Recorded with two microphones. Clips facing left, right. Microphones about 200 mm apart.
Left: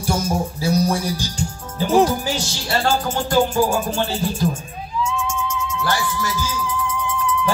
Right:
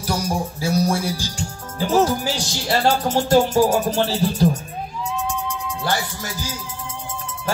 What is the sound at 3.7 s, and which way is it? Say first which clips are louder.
Music: right 2 dB; 40° right (ahead or behind).